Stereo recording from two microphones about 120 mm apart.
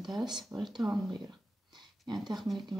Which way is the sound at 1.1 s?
35° right (ahead or behind).